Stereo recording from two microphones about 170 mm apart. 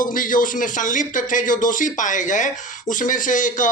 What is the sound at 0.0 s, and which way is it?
Speech, 55° left (ahead or behind).